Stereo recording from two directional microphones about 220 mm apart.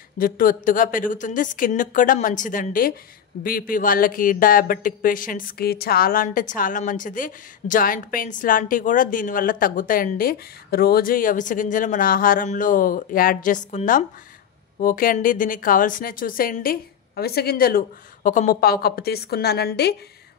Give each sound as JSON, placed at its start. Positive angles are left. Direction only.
{"t": 0.2, "sound": "speech", "side_deg": 40}